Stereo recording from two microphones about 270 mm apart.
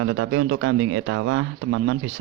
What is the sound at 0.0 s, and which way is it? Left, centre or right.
Speech, right.